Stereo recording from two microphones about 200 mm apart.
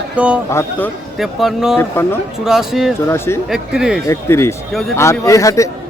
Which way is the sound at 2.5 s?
Centre (ahead or behind).